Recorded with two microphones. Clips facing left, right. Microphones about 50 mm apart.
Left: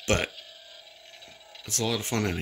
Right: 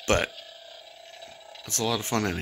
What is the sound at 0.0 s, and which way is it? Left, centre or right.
Speech, centre.